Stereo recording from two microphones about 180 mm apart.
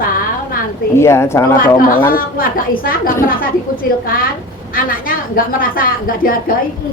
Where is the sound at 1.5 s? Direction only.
50° left (ahead or behind).